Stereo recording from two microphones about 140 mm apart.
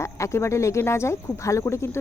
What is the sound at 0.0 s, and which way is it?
Speech, 20° left (ahead or behind).